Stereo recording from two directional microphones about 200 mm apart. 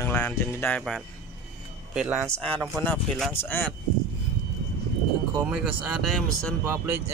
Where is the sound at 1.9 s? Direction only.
10° right (ahead or behind).